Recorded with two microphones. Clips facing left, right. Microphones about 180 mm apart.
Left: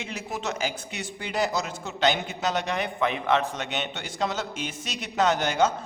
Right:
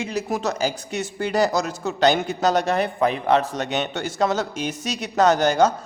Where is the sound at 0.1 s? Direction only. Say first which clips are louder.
Right 5 dB; 40° right (ahead or behind).